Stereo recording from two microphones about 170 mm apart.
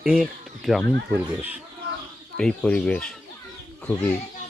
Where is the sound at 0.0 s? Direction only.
5° right (ahead or behind).